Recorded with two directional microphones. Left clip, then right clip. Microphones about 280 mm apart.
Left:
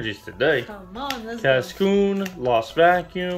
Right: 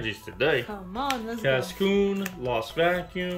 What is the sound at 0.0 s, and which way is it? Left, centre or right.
Speech, centre.